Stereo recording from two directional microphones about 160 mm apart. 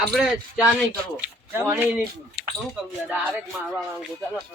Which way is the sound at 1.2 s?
10° right (ahead or behind).